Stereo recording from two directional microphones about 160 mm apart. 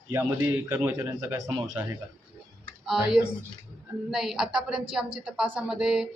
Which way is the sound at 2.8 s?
5° right (ahead or behind).